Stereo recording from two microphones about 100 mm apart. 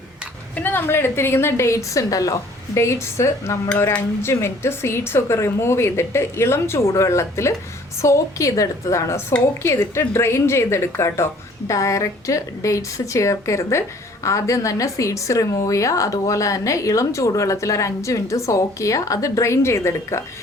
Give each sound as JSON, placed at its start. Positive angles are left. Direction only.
{"t": 0.5, "sound": "a woman's voice", "side_deg": 20}